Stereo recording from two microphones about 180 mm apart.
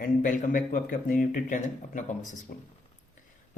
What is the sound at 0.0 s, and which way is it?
Speech, 50° left (ahead or behind).